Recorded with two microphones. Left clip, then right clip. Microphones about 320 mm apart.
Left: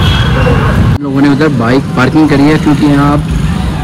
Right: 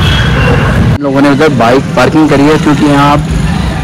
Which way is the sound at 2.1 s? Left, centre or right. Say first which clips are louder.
Left 1 dB; right.